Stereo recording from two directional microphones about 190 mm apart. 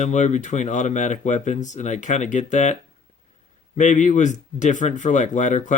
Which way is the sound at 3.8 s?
40° left (ahead or behind).